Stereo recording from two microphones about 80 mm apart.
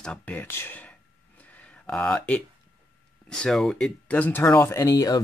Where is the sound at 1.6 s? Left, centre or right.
Centre.